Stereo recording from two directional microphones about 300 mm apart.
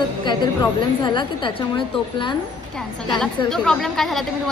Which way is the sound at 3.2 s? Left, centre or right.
Centre.